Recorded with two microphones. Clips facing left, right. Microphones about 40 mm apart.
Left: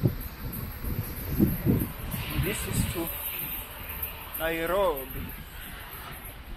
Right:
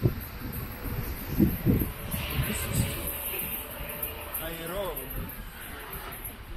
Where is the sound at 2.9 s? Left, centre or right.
Centre.